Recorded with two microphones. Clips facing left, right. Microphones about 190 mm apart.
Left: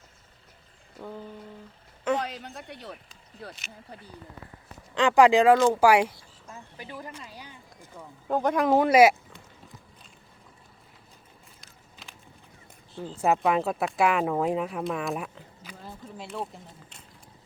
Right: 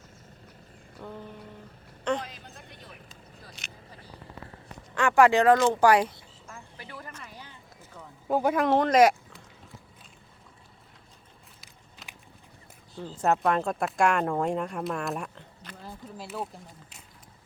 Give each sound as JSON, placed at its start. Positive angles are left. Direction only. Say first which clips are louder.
{"t": 2.1, "sound": "speech", "louder": "left 5 dB", "side_deg": 75}
{"t": 4.9, "sound": "speech", "louder": "left 2 dB", "side_deg": 15}
{"t": 6.5, "sound": "a sound", "louder": "left 3 dB", "side_deg": 20}
{"t": 8.3, "sound": "speech", "louder": "left 1 dB", "side_deg": -5}
{"t": 12.0, "sound": "a sound", "louder": "even", "side_deg": 0}
{"t": 13.1, "sound": "speech", "louder": "left 1 dB", "side_deg": 5}